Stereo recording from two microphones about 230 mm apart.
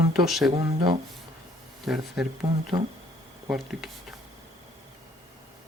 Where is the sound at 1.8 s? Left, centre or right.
Centre.